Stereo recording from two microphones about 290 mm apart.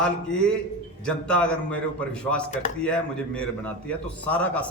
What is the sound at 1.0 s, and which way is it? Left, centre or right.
A man's voice, centre.